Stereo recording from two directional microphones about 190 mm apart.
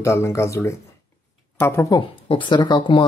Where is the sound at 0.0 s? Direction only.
15° left (ahead or behind).